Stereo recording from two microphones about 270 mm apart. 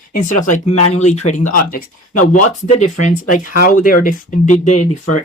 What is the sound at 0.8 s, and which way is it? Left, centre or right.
Speech, left.